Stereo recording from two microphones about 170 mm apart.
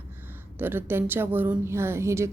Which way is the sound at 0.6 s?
10° right (ahead or behind).